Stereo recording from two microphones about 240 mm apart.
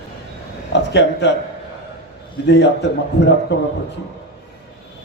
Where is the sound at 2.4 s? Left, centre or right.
Left.